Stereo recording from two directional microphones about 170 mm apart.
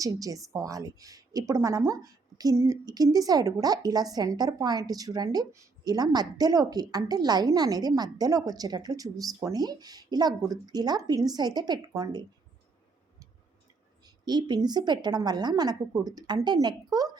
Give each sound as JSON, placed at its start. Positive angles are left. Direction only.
{"t": 0.0, "sound": "a woman's voice", "side_deg": -20}
{"t": 14.0, "sound": "a woman's voice", "side_deg": -25}